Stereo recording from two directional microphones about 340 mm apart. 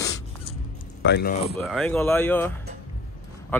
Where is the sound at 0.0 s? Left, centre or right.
Centre.